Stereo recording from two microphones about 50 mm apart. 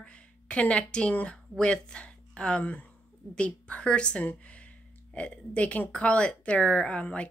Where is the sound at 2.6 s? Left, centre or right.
Left.